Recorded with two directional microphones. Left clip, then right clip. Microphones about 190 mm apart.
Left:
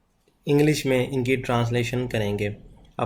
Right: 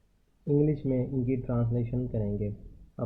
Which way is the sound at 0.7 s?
15° left (ahead or behind).